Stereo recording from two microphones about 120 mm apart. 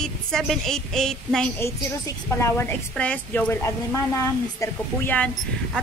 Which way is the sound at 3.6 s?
25° left (ahead or behind).